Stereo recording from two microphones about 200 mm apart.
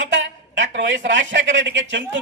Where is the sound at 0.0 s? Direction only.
70° right (ahead or behind).